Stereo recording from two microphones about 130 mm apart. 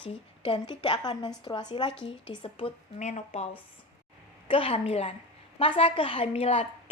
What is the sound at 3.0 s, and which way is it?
Speech, 65° left (ahead or behind).